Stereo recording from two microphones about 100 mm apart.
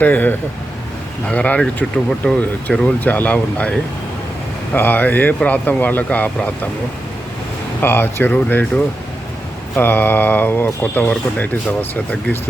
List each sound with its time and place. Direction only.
0.0 s speech: 15° left (ahead or behind)
7.8 s speech: 20° left (ahead or behind)